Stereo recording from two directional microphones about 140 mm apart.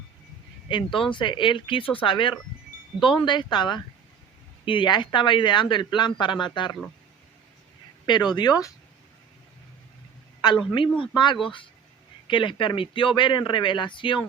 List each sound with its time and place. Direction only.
0.7 s speech: 35° left (ahead or behind)
8.0 s speech: 30° left (ahead or behind)
10.7 s speech: 40° left (ahead or behind)